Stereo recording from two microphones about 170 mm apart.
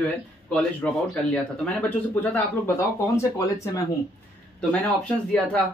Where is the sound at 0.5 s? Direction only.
5° left (ahead or behind).